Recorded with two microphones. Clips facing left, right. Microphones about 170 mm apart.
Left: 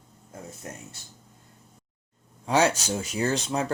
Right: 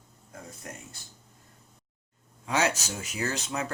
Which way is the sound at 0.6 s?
30° left (ahead or behind).